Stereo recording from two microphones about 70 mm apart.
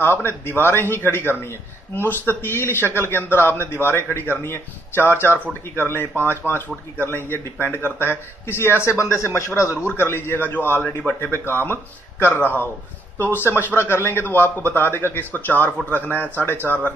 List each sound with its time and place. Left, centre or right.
0.0 s a man's voice: left
9.8 s a man's voice: left
13.7 s a man's voice: left
16.5 s speech: right